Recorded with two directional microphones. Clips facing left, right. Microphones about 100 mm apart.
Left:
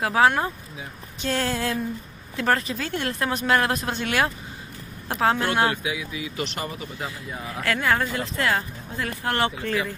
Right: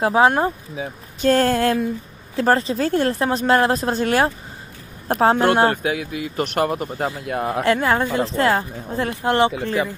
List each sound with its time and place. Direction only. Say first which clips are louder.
0.0 s speech: right 4 dB; 25° right (ahead or behind)
1.2 s speech: right 9 dB; 50° right (ahead or behind)
2.3 s speech: right 6 dB; 35° right (ahead or behind); by 6.9 s 60° right (ahead or behind)
6.9 s speech: right 9 dB; 40° right (ahead or behind)
7.2 s speech: right 11 dB; 65° right (ahead or behind)
7.6 s speech: right 3 dB; 30° right (ahead or behind)
9.2 s speech: right 7 dB; 20° right (ahead or behind)